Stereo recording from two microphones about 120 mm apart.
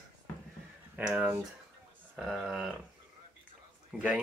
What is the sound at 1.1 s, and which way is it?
Speech, 10° right (ahead or behind).